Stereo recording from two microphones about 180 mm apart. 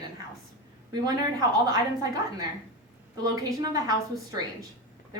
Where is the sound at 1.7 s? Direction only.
20° right (ahead or behind).